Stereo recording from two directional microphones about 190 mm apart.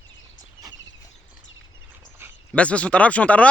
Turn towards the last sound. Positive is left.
turn(degrees=5)  # may be behind; listen again after turning